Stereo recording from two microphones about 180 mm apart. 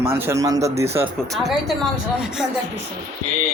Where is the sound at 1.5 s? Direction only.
Centre (ahead or behind).